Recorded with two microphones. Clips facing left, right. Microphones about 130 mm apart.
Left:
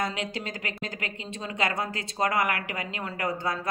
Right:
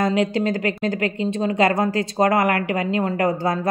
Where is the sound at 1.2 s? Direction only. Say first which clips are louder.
Right 11 dB; 35° right (ahead or behind).